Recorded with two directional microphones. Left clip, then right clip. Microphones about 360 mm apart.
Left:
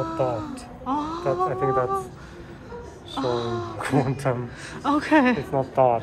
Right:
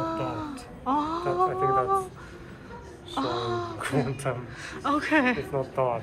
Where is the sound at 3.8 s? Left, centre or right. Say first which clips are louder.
Left 7 dB; left.